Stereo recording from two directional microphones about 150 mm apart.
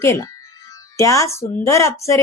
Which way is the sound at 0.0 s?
20° left (ahead or behind).